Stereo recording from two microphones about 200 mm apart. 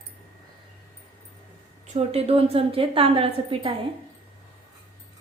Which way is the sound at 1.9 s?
30° right (ahead or behind).